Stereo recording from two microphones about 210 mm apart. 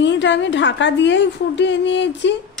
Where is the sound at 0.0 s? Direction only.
60° left (ahead or behind).